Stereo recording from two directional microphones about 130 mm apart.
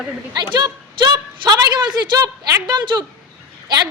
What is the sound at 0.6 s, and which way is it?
A woman's voice, 35° right (ahead or behind).